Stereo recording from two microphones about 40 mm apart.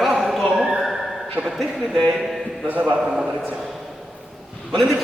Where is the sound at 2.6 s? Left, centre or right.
Right.